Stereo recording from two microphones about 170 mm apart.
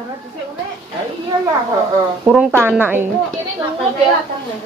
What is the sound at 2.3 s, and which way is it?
Speech, 10° right (ahead or behind).